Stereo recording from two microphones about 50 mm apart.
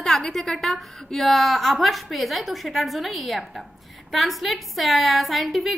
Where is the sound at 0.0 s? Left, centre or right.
Centre.